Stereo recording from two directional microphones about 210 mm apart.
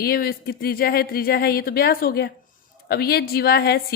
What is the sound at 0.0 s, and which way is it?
A woman's voice, 45° left (ahead or behind).